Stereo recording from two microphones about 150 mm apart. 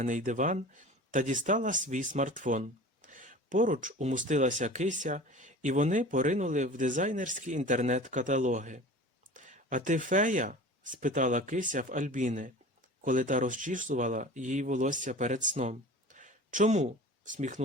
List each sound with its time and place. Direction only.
0.0 s speech: 60° right (ahead or behind)